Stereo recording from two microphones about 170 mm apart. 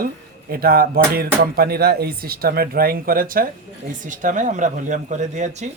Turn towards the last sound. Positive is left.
turn(degrees=-45)  # may be behind; listen again after turning